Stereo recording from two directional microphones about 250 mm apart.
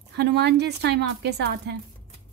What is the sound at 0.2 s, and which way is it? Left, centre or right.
A woman's voice, right.